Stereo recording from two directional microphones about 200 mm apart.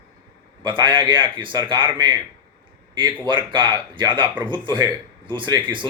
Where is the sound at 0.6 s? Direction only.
25° right (ahead or behind).